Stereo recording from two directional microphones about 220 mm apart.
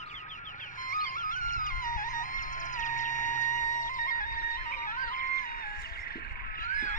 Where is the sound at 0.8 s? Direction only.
40° left (ahead or behind).